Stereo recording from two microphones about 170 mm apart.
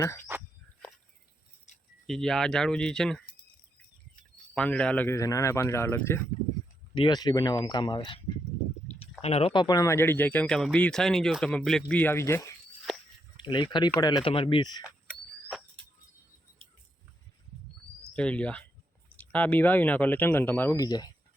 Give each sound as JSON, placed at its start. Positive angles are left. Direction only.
{"t": 2.0, "sound": "speech", "side_deg": 0}
{"t": 4.5, "sound": "speech", "side_deg": 5}
{"t": 6.9, "sound": "speech", "side_deg": 25}
{"t": 9.2, "sound": "speech", "side_deg": 35}
{"t": 12.9, "sound": "a sound", "side_deg": 0}
{"t": 13.3, "sound": "speech", "side_deg": 30}
{"t": 18.1, "sound": "a sound", "side_deg": 5}
{"t": 19.1, "sound": "speech", "side_deg": 10}
{"t": 20.8, "sound": "speech", "side_deg": 25}